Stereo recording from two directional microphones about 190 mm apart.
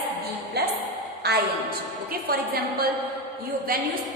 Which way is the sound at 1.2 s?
55° right (ahead or behind).